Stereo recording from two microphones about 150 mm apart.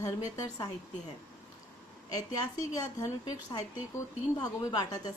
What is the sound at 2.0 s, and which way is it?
Speech, 25° left (ahead or behind).